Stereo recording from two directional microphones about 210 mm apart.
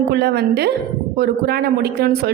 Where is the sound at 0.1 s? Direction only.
50° right (ahead or behind).